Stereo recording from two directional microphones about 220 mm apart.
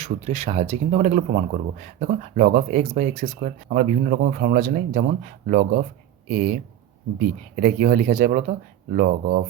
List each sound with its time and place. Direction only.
0.0 s speech: 30° right (ahead or behind)